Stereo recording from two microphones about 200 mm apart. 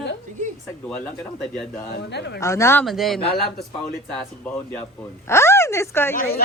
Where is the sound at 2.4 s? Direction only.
15° left (ahead or behind).